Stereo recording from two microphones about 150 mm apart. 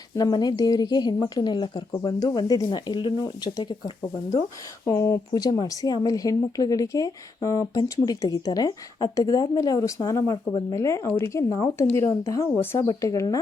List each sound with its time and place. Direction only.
0.2 s a woman's voice: 25° left (ahead or behind)